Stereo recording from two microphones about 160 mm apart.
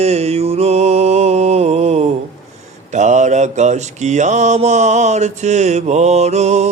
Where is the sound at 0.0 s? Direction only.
40° right (ahead or behind).